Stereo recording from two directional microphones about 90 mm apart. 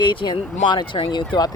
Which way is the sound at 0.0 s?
65° left (ahead or behind).